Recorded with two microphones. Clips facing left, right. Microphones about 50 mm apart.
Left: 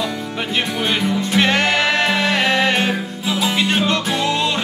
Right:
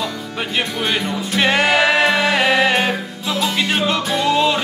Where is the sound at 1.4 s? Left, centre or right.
Centre.